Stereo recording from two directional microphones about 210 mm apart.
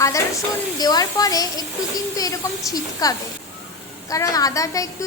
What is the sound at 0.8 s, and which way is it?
A woman's voice, 20° left (ahead or behind).